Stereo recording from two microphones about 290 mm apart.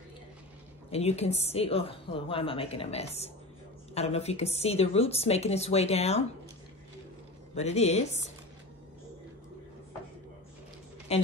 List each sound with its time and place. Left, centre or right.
0.8 s a woman's voice: left
7.5 s a woman's voice: left
11.1 s a man's voice: left